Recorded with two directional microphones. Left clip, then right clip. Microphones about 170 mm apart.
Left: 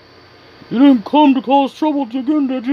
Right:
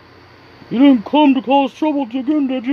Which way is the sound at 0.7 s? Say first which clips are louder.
Left 1 dB; 10° left (ahead or behind).